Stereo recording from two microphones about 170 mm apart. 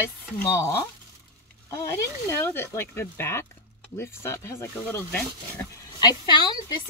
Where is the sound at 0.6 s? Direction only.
20° left (ahead or behind).